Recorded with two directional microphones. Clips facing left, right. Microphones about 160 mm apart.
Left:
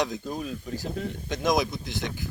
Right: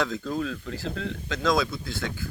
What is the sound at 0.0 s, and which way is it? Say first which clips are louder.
Speech: right 2 dB; 15° left (ahead or behind).